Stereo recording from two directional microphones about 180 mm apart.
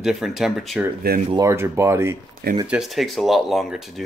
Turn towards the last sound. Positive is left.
turn(degrees=0)  # may be behind; listen again after turning